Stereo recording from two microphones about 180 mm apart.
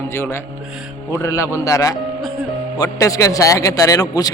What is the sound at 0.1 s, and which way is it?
Speech, 15° left (ahead or behind).